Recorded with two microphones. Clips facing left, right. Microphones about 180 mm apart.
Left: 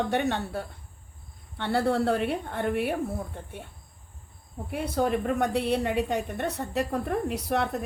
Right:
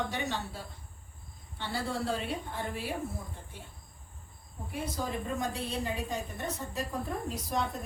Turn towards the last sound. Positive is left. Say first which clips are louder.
# left 6 dB
turn(degrees=70)  # may be behind; listen again after turning